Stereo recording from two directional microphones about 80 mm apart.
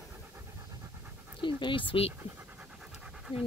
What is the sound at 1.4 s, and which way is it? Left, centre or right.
Speech, left.